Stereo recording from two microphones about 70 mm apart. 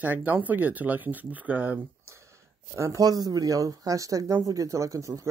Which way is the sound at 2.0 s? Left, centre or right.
Right.